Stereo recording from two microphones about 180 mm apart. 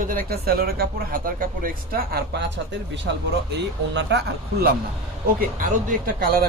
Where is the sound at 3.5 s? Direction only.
70° right (ahead or behind).